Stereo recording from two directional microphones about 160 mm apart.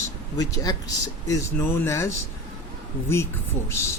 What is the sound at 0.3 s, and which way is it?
Speech, 20° left (ahead or behind).